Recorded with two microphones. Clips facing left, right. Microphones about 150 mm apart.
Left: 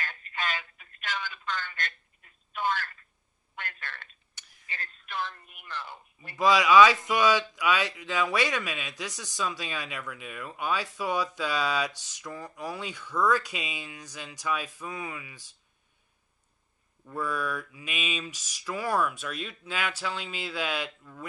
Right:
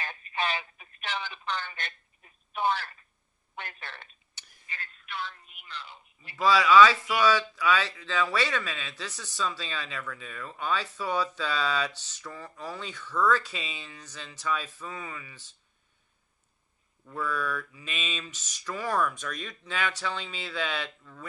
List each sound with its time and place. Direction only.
0.0 s telephone: 20° right (ahead or behind)
3.5 s a sound: 20° right (ahead or behind)
4.7 s telephone: 40° left (ahead or behind)
6.3 s speech: 15° left (ahead or behind)
17.0 s speech: 10° left (ahead or behind)